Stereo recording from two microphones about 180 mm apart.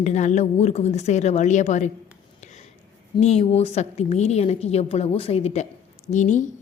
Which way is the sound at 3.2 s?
35° left (ahead or behind).